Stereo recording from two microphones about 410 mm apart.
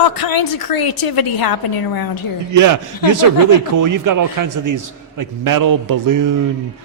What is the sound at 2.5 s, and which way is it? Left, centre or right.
A man's voice, right.